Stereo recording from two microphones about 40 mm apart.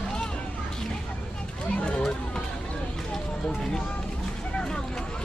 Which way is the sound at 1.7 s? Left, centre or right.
Left.